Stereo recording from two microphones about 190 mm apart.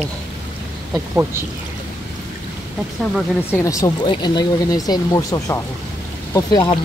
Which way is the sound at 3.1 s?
15° left (ahead or behind).